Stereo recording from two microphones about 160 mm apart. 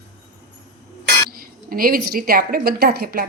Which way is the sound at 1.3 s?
65° right (ahead or behind).